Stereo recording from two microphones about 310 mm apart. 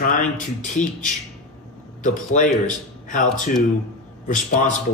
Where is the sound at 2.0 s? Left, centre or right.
Left.